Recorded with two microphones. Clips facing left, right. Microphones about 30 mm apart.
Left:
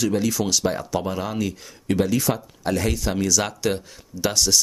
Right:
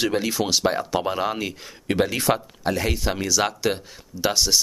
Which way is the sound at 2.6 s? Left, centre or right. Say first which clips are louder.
Left 1 dB; centre.